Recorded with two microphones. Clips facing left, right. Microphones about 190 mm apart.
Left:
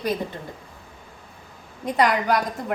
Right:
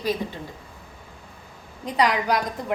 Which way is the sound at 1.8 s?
50° left (ahead or behind).